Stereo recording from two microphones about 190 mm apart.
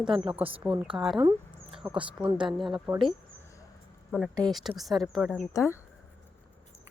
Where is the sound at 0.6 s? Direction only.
5° right (ahead or behind).